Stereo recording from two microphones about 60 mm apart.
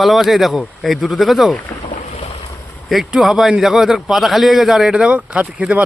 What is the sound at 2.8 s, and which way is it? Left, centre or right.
Speech, centre.